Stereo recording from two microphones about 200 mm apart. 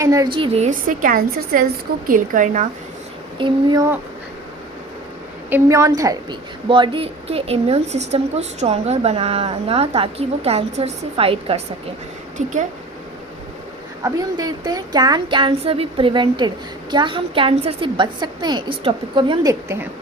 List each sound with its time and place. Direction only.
0.0 s a woman's voice: 15° right (ahead or behind)
0.3 s a woman's voice: 30° right (ahead or behind)
3.3 s a woman's voice: 20° right (ahead or behind)
5.5 s a woman's voice: 15° right (ahead or behind); by 12.5 s 35° right (ahead or behind)
14.0 s a woman's voice: 20° right (ahead or behind)